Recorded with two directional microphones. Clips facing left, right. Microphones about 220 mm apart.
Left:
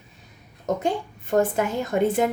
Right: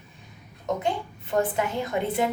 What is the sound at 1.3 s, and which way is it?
Speech, 45° left (ahead or behind).